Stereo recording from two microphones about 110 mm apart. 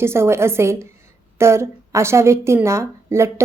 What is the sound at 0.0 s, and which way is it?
A woman's voice, 25° right (ahead or behind).